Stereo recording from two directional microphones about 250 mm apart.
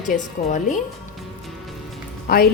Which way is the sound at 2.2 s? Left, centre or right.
Left.